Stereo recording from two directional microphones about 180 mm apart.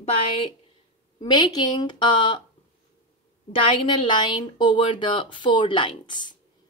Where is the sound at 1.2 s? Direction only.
25° left (ahead or behind).